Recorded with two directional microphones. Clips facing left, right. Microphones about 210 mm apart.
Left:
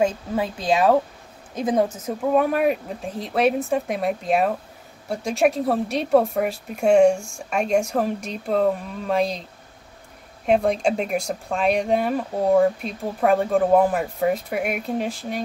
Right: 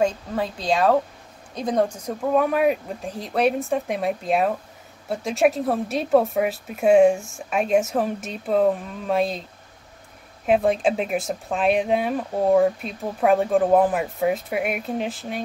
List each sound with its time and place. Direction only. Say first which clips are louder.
0.0 s speech: left 1 dB; 5° left (ahead or behind)
10.4 s speech: even; centre (ahead or behind)